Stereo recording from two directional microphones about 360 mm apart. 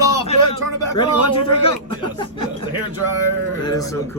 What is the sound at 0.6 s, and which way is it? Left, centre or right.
Speech, left.